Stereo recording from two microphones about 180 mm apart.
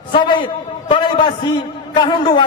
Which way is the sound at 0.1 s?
25° left (ahead or behind).